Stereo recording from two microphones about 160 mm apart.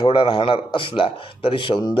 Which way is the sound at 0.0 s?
30° left (ahead or behind).